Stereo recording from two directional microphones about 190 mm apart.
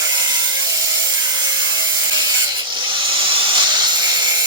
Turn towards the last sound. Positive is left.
turn(degrees=-20)  # may be behind; listen again after turning